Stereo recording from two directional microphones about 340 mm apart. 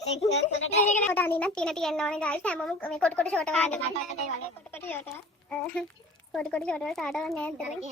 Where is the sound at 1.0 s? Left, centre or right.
Centre.